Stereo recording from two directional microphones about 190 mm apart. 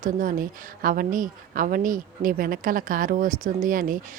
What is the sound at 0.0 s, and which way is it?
A woman's voice, 45° right (ahead or behind).